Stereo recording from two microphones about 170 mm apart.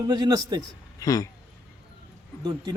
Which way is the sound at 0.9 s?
20° left (ahead or behind).